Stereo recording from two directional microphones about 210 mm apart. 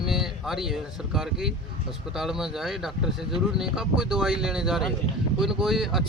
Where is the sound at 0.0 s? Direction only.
Centre (ahead or behind).